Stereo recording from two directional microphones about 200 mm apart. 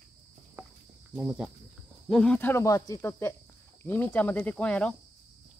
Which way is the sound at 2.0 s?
5° left (ahead or behind).